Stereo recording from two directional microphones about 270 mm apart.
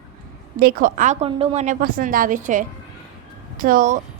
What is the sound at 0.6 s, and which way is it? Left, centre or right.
A woman's voice, right.